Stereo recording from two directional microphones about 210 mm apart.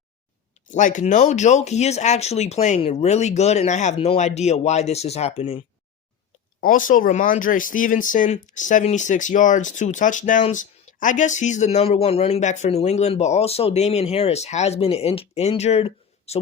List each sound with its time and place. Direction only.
0.7 s speech: 35° left (ahead or behind)
6.6 s speech: 40° left (ahead or behind)